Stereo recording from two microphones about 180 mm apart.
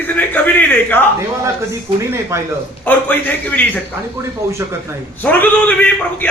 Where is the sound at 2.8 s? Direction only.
10° left (ahead or behind).